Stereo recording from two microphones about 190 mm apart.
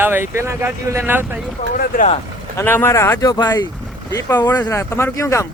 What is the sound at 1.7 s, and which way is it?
Speech, 45° left (ahead or behind).